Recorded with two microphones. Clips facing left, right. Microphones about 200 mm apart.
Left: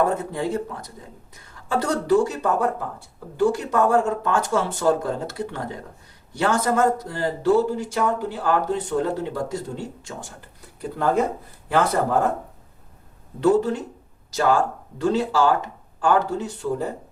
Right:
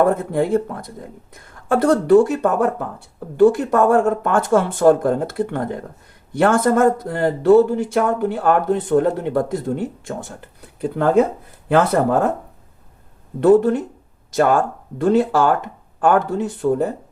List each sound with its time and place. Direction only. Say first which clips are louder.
0.0 s speech: right 6 dB; 55° right (ahead or behind)
13.4 s speech: right 6 dB; 55° right (ahead or behind)